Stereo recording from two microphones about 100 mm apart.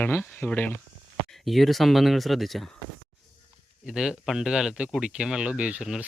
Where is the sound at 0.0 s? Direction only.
20° left (ahead or behind).